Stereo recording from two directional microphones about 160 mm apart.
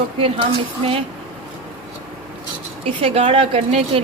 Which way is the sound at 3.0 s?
35° right (ahead or behind).